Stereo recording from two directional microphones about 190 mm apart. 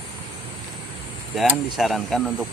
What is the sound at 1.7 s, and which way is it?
Speech, centre (ahead or behind).